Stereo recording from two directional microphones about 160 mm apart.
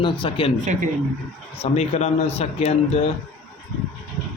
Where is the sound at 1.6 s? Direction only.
40° left (ahead or behind).